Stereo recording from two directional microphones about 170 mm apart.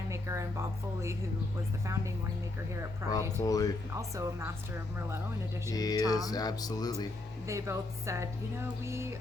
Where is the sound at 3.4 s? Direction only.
20° left (ahead or behind).